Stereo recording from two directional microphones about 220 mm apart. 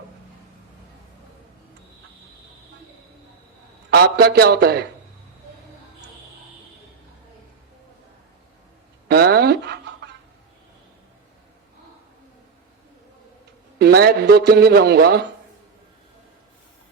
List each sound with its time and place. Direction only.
3.9 s a man's voice: 45° right (ahead or behind)
9.0 s a sound: 45° right (ahead or behind)
13.7 s a man's voice: 45° right (ahead or behind)